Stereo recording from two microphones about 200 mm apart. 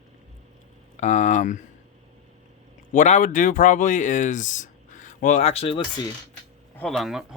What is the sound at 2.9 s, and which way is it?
Speech, 40° left (ahead or behind).